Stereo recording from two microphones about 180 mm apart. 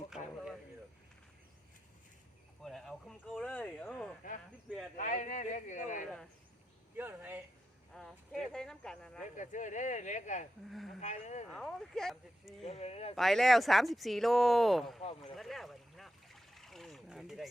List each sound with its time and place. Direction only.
2.6 s speech: centre (ahead or behind)
4.9 s speech: 45° left (ahead or behind)
6.9 s speech: 10° right (ahead or behind)
7.9 s a sound: centre (ahead or behind)
9.4 s speech: 45° left (ahead or behind)
10.7 s speech: centre (ahead or behind)
11.0 s speech: 40° left (ahead or behind)
11.4 s speech: centre (ahead or behind)
12.6 s speech: 35° left (ahead or behind)
13.1 s speech: centre (ahead or behind)
15.0 s speech: 35° left (ahead or behind)
15.4 s a sound: centre (ahead or behind)